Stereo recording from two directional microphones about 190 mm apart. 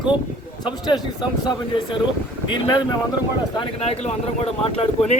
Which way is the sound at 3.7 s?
30° left (ahead or behind).